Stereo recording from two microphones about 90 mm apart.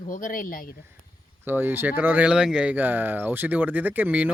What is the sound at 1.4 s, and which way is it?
Speech, 20° right (ahead or behind).